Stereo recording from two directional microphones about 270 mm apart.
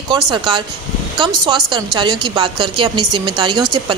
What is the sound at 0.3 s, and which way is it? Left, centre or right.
A woman's voice, centre.